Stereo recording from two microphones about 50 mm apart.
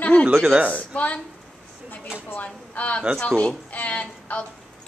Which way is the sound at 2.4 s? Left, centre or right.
Left.